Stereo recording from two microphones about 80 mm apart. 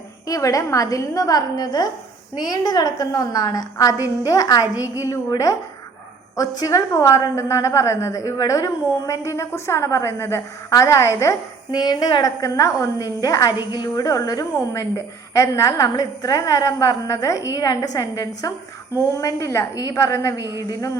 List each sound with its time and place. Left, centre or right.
0.3 s a woman's voice: left
6.3 s a woman's voice: left
11.7 s a woman's voice: left
13.7 s a woman's voice: left